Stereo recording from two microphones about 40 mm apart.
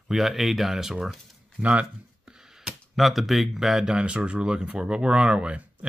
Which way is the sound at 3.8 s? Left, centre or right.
Right.